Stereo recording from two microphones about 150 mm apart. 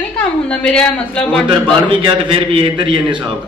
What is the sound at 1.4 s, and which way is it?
A man's voice, 35° right (ahead or behind).